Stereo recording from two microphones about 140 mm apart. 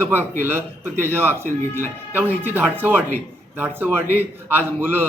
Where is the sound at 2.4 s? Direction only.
15° right (ahead or behind).